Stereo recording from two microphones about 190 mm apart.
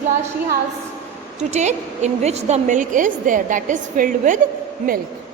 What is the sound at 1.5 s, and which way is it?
A woman's voice, 35° right (ahead or behind).